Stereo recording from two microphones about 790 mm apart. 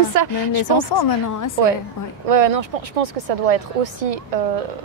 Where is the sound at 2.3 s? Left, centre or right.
Right.